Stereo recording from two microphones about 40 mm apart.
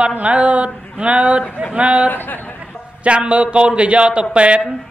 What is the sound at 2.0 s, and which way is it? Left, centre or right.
Speech, left.